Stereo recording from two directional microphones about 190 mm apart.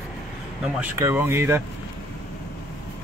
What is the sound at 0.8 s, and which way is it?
Speech, 15° right (ahead or behind).